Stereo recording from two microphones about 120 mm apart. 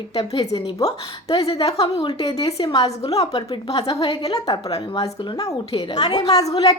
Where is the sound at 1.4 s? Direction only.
55° left (ahead or behind).